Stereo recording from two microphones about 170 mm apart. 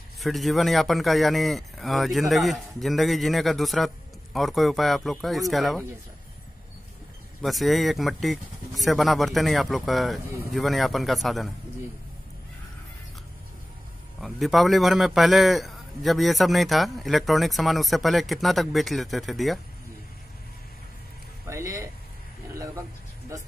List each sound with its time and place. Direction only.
0.2 s a man's voice: centre (ahead or behind)
7.4 s a man's voice: centre (ahead or behind)
14.2 s a man's voice: centre (ahead or behind)
21.5 s speech: 15° right (ahead or behind)